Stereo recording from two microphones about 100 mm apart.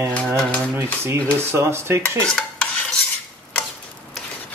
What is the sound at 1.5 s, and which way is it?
Speech, 25° right (ahead or behind).